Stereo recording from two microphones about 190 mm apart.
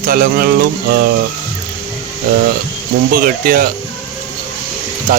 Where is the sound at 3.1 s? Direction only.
50° right (ahead or behind).